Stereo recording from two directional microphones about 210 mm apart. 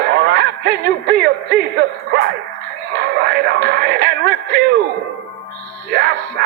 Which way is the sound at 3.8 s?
50° right (ahead or behind).